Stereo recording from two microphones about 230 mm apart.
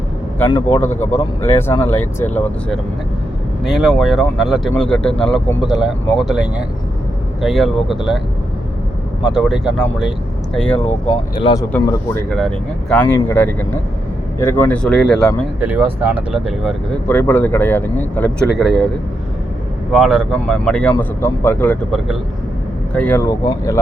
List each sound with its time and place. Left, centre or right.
0.3 s speech: centre
9.3 s speech: centre
11.3 s speech: left
11.7 s speech: centre
17.1 s speech: centre
19.9 s speech: centre